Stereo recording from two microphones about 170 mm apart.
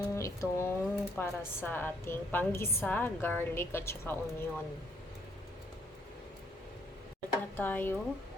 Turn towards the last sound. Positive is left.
turn(degrees=10)  # may be behind; listen again after turning